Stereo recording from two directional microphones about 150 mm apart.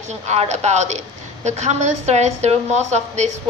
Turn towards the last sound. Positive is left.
turn(degrees=-50)  # may be behind; listen again after turning